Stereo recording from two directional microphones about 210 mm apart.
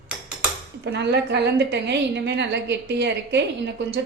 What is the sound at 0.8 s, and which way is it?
A woman's voice, 55° right (ahead or behind).